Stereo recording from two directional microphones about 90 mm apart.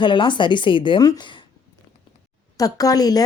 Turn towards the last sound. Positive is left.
turn(degrees=45)  # may be behind; listen again after turning